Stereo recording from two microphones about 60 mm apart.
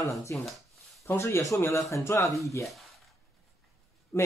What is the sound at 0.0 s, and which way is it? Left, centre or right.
Speech, left.